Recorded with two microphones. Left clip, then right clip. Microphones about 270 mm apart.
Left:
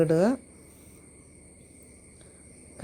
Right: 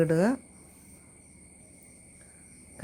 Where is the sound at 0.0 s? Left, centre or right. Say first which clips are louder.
Left 2 dB; centre.